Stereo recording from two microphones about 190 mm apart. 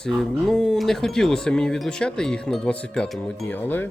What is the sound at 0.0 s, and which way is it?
Speech, centre (ahead or behind).